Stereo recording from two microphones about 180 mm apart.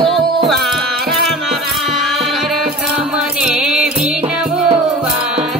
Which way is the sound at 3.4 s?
5° right (ahead or behind).